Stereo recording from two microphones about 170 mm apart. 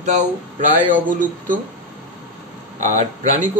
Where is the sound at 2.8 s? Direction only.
45° right (ahead or behind).